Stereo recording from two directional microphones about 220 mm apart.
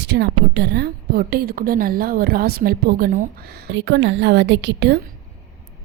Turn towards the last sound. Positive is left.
turn(degrees=-50)  # may be behind; listen again after turning